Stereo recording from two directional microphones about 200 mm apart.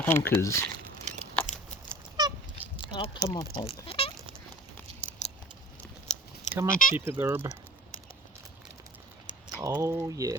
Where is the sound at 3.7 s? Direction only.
30° left (ahead or behind).